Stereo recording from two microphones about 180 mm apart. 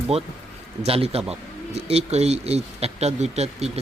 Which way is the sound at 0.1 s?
35° right (ahead or behind).